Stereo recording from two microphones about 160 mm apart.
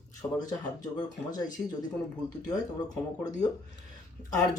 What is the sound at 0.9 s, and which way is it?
Speech, 25° left (ahead or behind).